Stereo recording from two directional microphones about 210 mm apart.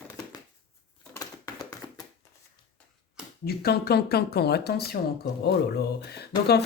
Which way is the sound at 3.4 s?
50° left (ahead or behind).